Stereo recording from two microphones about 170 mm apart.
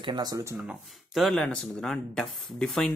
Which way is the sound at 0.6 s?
Centre (ahead or behind).